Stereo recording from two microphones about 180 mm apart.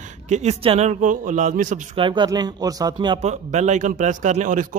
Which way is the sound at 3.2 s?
40° right (ahead or behind).